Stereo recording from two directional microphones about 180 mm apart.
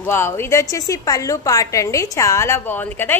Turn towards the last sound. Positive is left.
turn(degrees=10)  # may be behind; listen again after turning